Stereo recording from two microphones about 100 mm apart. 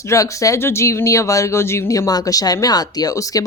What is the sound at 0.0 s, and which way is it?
Speech, 30° left (ahead or behind).